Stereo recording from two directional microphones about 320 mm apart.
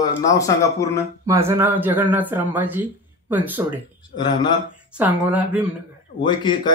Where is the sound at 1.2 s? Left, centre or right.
Centre.